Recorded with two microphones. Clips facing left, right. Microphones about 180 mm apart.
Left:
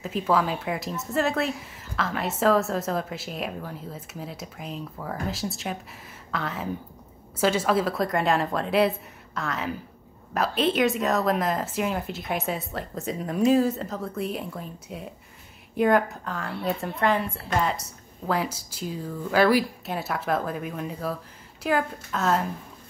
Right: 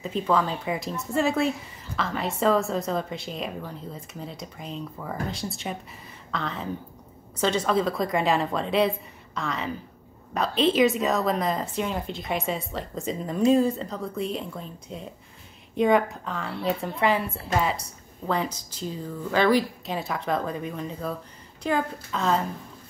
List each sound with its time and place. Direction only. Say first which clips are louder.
0.0 s speech: even; 5° left (ahead or behind)